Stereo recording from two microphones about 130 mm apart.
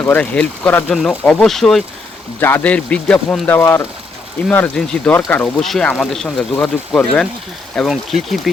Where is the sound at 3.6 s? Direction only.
20° left (ahead or behind).